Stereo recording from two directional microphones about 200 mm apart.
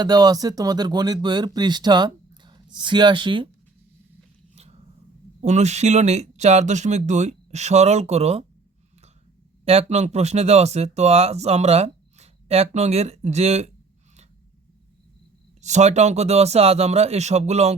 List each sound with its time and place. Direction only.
0.0 s speech: 20° right (ahead or behind)
4.5 s a sound: 30° right (ahead or behind)
5.4 s speech: 35° right (ahead or behind)
9.6 s speech: 30° right (ahead or behind)
15.6 s speech: 35° right (ahead or behind)